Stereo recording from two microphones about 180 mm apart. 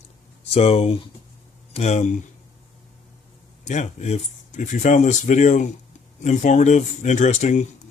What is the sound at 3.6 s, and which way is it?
Speech, 40° left (ahead or behind).